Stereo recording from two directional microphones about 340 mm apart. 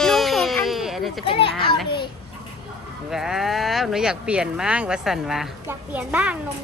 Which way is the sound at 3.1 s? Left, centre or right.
Centre.